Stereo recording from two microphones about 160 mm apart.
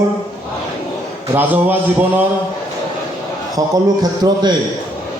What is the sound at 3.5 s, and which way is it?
Speech, 25° right (ahead or behind).